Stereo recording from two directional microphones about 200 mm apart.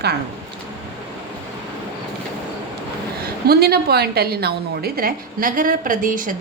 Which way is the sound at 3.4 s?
50° right (ahead or behind).